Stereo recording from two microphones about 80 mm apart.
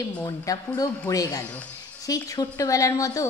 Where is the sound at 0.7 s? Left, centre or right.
Left.